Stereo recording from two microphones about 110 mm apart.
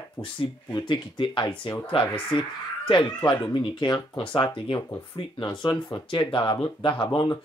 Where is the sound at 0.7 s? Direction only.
45° left (ahead or behind).